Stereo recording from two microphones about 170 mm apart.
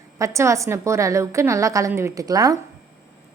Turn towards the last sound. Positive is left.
turn(degrees=-20)  # may be behind; listen again after turning